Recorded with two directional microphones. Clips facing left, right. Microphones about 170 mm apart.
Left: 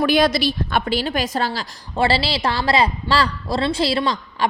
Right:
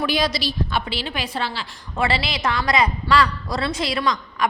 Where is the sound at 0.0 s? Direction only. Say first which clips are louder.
Left 6 dB; 55° left (ahead or behind).